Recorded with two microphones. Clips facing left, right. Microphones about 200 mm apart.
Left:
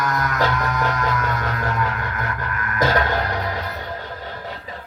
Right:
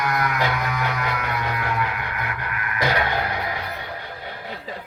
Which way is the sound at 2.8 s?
45° left (ahead or behind).